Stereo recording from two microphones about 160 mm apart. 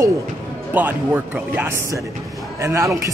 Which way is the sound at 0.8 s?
10° right (ahead or behind).